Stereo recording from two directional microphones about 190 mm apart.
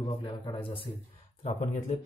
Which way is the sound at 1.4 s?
40° left (ahead or behind).